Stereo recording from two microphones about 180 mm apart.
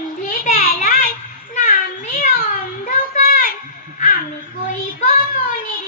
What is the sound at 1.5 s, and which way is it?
Child singing, 45° left (ahead or behind).